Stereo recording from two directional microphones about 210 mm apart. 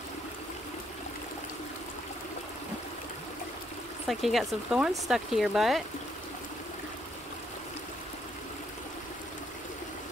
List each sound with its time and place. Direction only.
4.1 s speech: centre (ahead or behind)